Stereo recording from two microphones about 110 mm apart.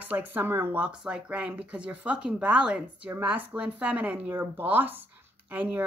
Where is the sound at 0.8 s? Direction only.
10° right (ahead or behind).